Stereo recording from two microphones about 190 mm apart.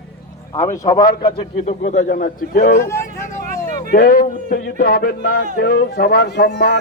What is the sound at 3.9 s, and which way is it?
Speech, 50° left (ahead or behind).